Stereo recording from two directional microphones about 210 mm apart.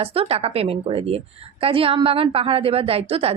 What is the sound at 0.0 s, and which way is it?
A woman's voice, 25° right (ahead or behind).